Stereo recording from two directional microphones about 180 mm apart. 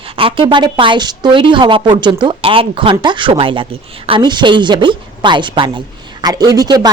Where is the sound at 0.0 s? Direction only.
30° right (ahead or behind).